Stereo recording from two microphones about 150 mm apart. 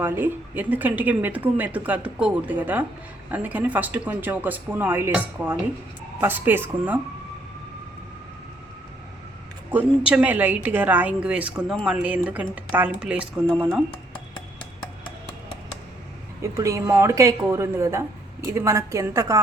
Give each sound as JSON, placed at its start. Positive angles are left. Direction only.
{"t": 0.0, "sound": "speech", "side_deg": -15}
{"t": 9.6, "sound": "speech", "side_deg": -10}
{"t": 16.4, "sound": "a woman's voice", "side_deg": -20}